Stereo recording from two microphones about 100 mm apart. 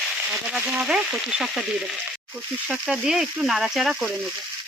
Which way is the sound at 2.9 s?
5° right (ahead or behind).